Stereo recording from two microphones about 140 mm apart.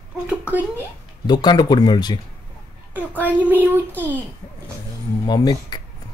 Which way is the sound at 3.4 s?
15° left (ahead or behind).